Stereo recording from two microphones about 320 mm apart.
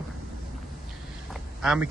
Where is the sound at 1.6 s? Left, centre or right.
Centre.